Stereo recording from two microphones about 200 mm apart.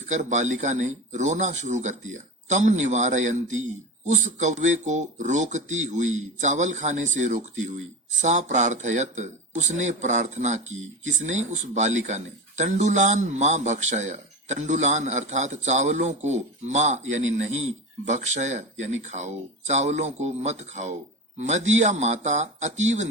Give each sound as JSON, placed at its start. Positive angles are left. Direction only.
{"t": 0.1, "sound": "a man's voice", "side_deg": -35}